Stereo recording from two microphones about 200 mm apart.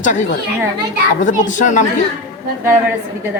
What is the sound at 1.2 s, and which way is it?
Speech, 40° left (ahead or behind).